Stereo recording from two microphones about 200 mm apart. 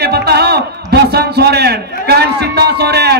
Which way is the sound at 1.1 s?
55° right (ahead or behind).